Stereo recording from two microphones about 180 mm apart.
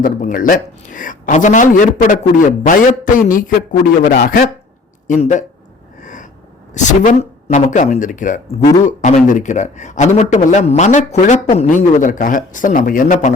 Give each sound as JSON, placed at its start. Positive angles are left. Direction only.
{"t": 0.0, "sound": "a man's voice", "side_deg": 50}
{"t": 6.0, "sound": "a sound", "side_deg": 45}
{"t": 6.7, "sound": "speech", "side_deg": 45}